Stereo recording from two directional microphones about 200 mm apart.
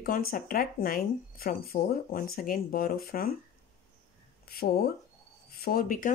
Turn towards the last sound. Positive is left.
turn(degrees=45)  # may be behind; listen again after turning